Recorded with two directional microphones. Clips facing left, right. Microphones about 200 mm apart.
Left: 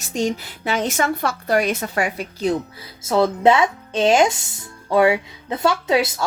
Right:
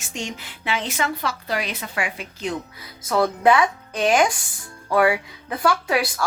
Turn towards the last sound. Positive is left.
turn(degrees=25)  # may be behind; listen again after turning